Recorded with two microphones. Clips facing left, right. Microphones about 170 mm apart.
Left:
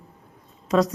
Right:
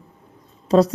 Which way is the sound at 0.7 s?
35° right (ahead or behind).